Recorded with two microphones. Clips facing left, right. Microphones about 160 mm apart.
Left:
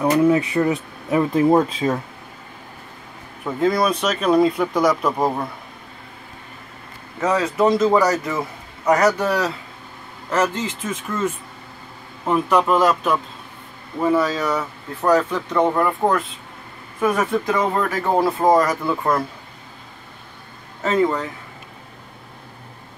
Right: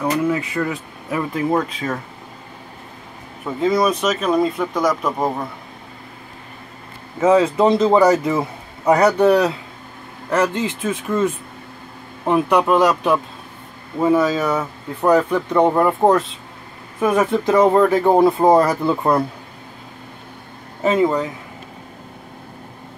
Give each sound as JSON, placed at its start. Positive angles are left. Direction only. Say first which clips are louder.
{"t": 0.0, "sound": "speech", "louder": "left 4 dB", "side_deg": 20}
{"t": 3.4, "sound": "speech", "louder": "right 1 dB", "side_deg": 0}
{"t": 7.2, "sound": "a man's voice", "louder": "right 4 dB", "side_deg": -25}
{"t": 17.0, "sound": "speech", "louder": "right 3 dB", "side_deg": -10}
{"t": 17.3, "sound": "speech", "louder": "right 5 dB", "side_deg": -30}
{"t": 18.0, "sound": "a man's voice", "louder": "right 4 dB", "side_deg": -20}
{"t": 20.8, "sound": "speech", "louder": "right 2 dB", "side_deg": -15}